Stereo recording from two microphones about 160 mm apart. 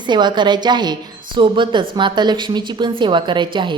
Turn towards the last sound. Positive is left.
turn(degrees=-30)  # may be behind; listen again after turning